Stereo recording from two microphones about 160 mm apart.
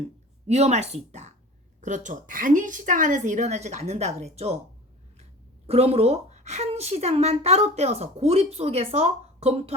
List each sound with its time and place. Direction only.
0.4 s a woman's voice: 45° right (ahead or behind)
5.6 s a woman's voice: 40° right (ahead or behind)